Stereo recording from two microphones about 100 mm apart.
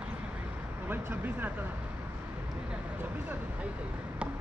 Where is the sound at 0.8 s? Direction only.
20° right (ahead or behind).